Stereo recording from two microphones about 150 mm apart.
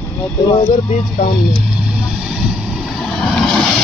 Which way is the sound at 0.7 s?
65° left (ahead or behind).